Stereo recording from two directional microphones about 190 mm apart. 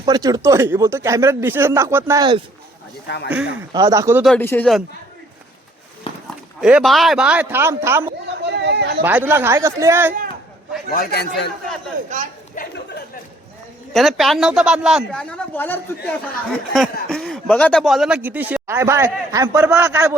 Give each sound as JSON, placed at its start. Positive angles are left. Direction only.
{"t": 0.0, "sound": "speech", "side_deg": -20}
{"t": 3.2, "sound": "speech", "side_deg": -5}
{"t": 3.7, "sound": "speech", "side_deg": -20}
{"t": 4.4, "sound": "speech", "side_deg": 10}
{"t": 6.6, "sound": "speech", "side_deg": -5}
{"t": 8.3, "sound": "a sound", "side_deg": -65}
{"t": 9.0, "sound": "speech", "side_deg": -10}
{"t": 10.9, "sound": "a man's voice", "side_deg": 55}
{"t": 12.0, "sound": "speech", "side_deg": -40}
{"t": 12.6, "sound": "a sound", "side_deg": 45}
{"t": 13.9, "sound": "a man's voice", "side_deg": 0}